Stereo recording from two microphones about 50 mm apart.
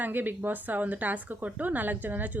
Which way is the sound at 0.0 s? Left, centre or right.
Right.